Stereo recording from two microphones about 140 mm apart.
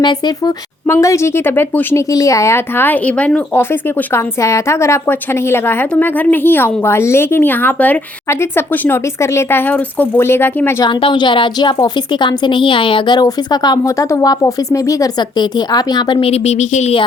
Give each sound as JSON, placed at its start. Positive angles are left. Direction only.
{"t": 0.0, "sound": "a woman's voice", "side_deg": 30}
{"t": 0.9, "sound": "speech", "side_deg": 20}
{"t": 10.8, "sound": "a woman's voice", "side_deg": 35}
{"t": 16.2, "sound": "speech", "side_deg": 50}